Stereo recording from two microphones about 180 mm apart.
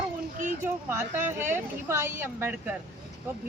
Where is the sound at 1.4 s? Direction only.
15° right (ahead or behind).